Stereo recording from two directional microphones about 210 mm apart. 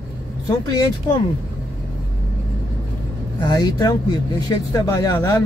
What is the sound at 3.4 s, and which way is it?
Speech, 20° left (ahead or behind).